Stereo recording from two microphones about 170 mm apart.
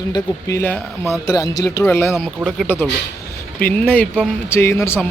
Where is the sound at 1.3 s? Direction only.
20° left (ahead or behind).